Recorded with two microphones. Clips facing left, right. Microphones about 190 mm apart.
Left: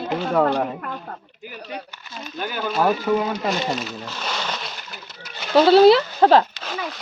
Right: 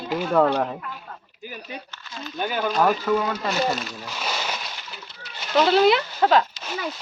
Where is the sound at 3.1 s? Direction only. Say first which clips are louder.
Left 2 dB; 20° left (ahead or behind).